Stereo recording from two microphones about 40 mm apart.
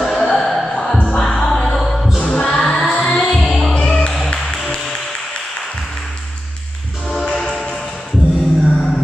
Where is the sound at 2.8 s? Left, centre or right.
Centre.